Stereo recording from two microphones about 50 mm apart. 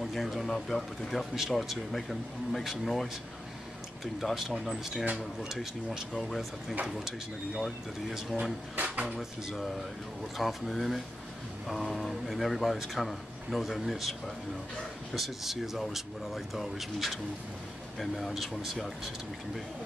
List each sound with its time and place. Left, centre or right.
0.0 s speech: centre
6.1 s speech: centre
6.9 s speech: centre
8.7 s drawer open or close: right
9.5 s speech: centre